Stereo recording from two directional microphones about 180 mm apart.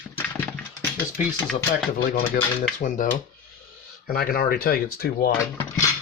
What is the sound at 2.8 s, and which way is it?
Speech, 45° left (ahead or behind).